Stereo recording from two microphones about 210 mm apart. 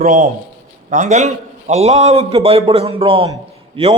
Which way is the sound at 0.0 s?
35° right (ahead or behind).